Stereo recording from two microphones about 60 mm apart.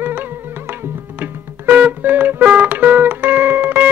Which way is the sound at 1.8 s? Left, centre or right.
Right.